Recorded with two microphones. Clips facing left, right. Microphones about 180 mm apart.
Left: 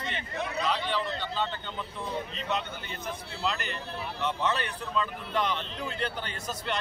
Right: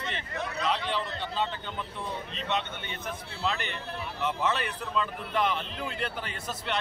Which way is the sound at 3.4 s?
Centre (ahead or behind).